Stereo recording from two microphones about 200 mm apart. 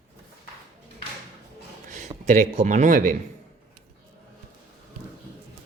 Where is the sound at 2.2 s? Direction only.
35° right (ahead or behind).